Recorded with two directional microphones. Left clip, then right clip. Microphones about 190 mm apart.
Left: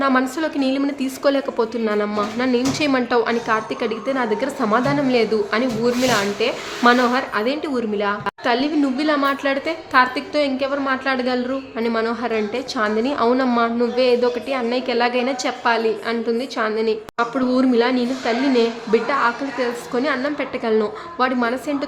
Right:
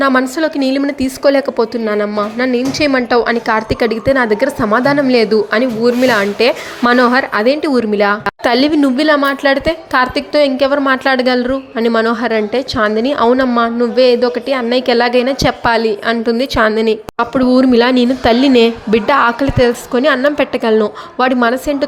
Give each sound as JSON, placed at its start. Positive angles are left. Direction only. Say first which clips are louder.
{"t": 0.0, "sound": "a woman's voice", "louder": "right 6 dB", "side_deg": -30}